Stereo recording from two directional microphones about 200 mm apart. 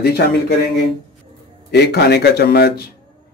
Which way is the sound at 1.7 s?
55° left (ahead or behind).